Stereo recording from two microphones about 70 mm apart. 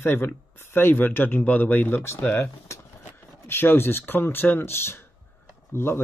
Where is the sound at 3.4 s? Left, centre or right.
Left.